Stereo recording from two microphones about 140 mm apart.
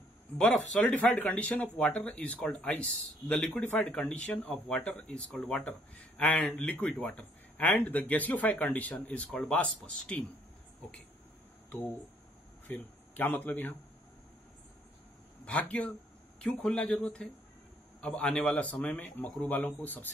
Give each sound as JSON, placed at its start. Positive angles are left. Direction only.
{"t": 0.4, "sound": "speech", "side_deg": 5}
{"t": 12.6, "sound": "speech", "side_deg": 15}
{"t": 15.4, "sound": "speech", "side_deg": 10}